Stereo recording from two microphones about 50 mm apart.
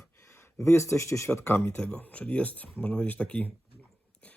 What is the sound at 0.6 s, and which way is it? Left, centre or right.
Speech, left.